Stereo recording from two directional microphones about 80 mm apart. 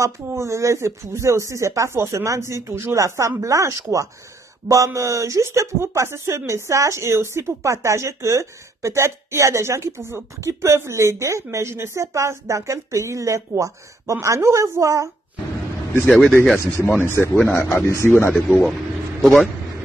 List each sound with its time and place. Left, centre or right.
0.0 s speech: right
16.1 s speech: centre
17.0 s speech: left
17.3 s speech: centre
17.6 s speech: left
18.3 s speech: centre